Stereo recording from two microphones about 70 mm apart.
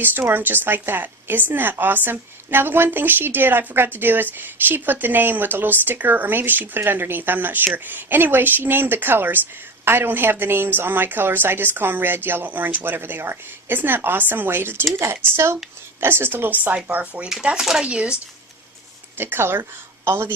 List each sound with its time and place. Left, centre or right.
0.3 s a woman's voice: right
16.0 s a woman's voice: right
17.4 s speech: centre
19.1 s a woman's voice: right